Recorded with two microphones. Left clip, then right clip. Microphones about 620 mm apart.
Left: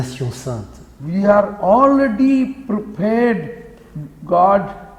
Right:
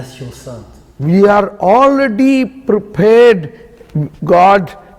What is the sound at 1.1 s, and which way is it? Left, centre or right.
A man's voice, right.